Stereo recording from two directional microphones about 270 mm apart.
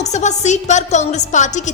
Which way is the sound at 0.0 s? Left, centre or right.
Left.